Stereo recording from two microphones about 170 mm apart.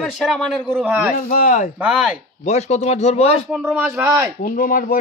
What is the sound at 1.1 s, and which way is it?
Speech, 55° left (ahead or behind).